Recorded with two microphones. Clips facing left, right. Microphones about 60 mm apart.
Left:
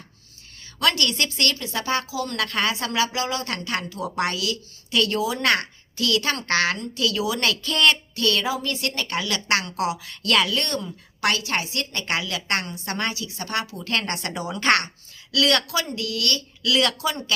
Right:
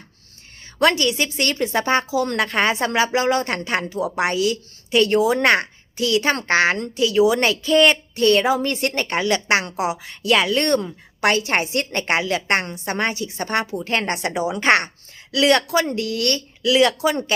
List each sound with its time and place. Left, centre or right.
0.8 s speech: right
1.0 s speech: centre
1.5 s speech: right; by 10.5 s centre
10.5 s a woman's voice: right
11.2 s a woman's voice: right
16.7 s speech: right